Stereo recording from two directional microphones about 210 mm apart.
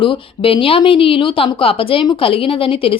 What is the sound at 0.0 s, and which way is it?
A woman's voice, 25° left (ahead or behind).